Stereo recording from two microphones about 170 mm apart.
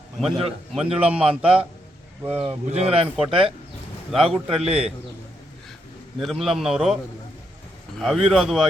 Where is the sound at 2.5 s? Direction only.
35° right (ahead or behind).